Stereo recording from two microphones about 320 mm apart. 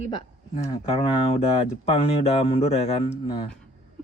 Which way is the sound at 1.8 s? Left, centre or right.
Centre.